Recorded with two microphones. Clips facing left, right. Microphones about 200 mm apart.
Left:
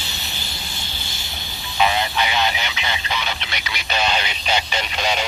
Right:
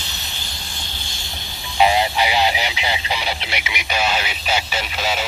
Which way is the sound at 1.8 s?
20° right (ahead or behind).